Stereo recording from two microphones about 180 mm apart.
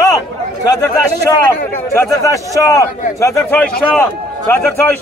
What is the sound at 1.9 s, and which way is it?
A man's voice, 15° left (ahead or behind).